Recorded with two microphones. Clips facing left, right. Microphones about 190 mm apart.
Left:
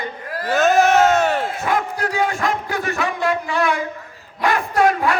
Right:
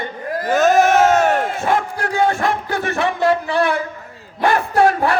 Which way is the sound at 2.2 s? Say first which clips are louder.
Right 5 dB; 30° right (ahead or behind).